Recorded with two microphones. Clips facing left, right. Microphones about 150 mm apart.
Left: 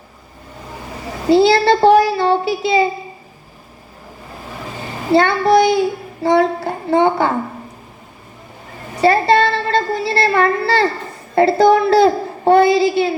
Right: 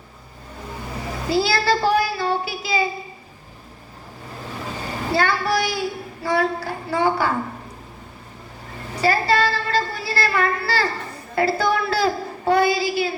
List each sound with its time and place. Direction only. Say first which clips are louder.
1.3 s child singing: left 9 dB; 25° left (ahead or behind)
5.1 s child singing: left 9 dB; 25° left (ahead or behind)
9.0 s child singing: left 6 dB; 25° left (ahead or behind)
11.3 s a child's voice: left 9 dB; 25° left (ahead or behind)